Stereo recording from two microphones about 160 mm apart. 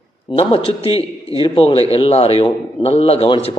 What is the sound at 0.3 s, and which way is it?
A man's voice, 40° left (ahead or behind).